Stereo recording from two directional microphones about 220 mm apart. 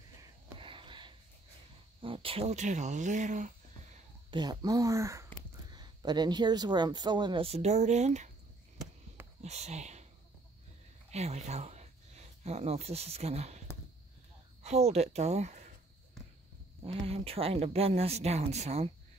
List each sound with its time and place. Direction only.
0.2 s a sound: 25° right (ahead or behind)
2.0 s speech: 25° right (ahead or behind)
4.3 s speech: 20° right (ahead or behind)
8.7 s basketball bounce: 10° right (ahead or behind)
9.4 s speech: 30° right (ahead or behind)
11.1 s speech: 30° right (ahead or behind)
17.0 s speech: 25° right (ahead or behind)